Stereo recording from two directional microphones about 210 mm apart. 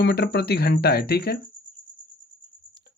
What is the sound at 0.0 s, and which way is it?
Speech, 50° left (ahead or behind).